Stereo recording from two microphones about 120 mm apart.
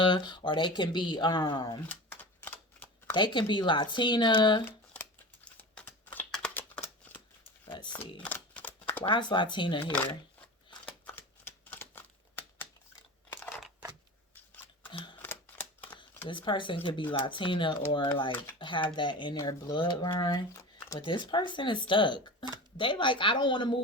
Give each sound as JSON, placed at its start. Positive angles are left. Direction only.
{"t": 0.0, "sound": "speech", "side_deg": 40}
{"t": 2.4, "sound": "camera", "side_deg": 15}
{"t": 3.2, "sound": "speech", "side_deg": 40}
{"t": 5.5, "sound": "a sound", "side_deg": 15}
{"t": 7.6, "sound": "typing", "side_deg": 40}
{"t": 8.2, "sound": "a sound", "side_deg": 10}
{"t": 9.0, "sound": "speech", "side_deg": 40}
{"t": 9.8, "sound": "speech", "side_deg": 15}
{"t": 11.1, "sound": "shuffling cards", "side_deg": 15}
{"t": 14.8, "sound": "typewriter", "side_deg": 40}
{"t": 15.2, "sound": "typewriter", "side_deg": 15}
{"t": 16.3, "sound": "speech", "side_deg": 40}
{"t": 20.5, "sound": "shuffling cards", "side_deg": 25}
{"t": 21.0, "sound": "speech", "side_deg": 40}